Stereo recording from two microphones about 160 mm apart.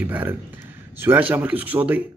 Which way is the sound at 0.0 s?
10° right (ahead or behind).